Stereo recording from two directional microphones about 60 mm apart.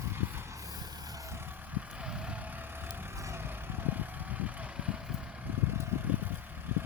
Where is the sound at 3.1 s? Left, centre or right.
Right.